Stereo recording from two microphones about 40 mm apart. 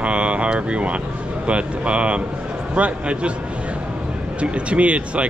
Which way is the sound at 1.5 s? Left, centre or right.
Right.